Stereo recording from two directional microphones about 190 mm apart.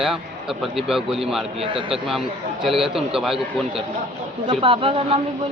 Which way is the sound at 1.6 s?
25° right (ahead or behind).